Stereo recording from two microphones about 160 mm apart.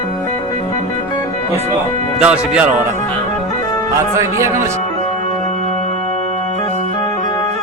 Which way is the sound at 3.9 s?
20° right (ahead or behind).